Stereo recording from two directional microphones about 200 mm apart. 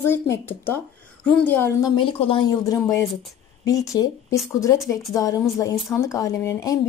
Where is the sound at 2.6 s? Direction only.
15° left (ahead or behind).